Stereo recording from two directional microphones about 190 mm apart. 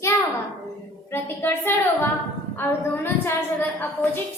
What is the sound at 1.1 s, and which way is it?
A woman's voice, 10° left (ahead or behind).